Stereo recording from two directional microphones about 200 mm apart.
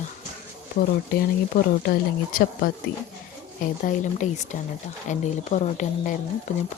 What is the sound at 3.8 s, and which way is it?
Speech, 35° left (ahead or behind).